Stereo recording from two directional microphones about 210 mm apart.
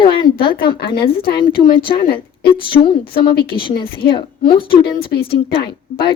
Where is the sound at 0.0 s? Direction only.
20° left (ahead or behind).